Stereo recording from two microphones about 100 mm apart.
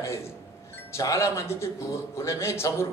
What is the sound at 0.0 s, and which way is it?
A man's voice, 25° left (ahead or behind).